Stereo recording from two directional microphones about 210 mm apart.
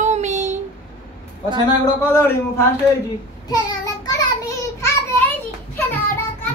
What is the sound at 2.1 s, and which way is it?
Speech, 10° left (ahead or behind).